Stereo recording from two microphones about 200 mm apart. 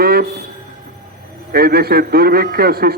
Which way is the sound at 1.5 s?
50° right (ahead or behind).